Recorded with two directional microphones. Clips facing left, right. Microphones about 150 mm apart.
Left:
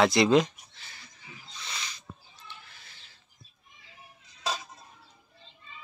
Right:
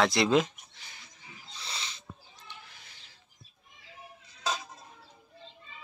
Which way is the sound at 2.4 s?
15° right (ahead or behind).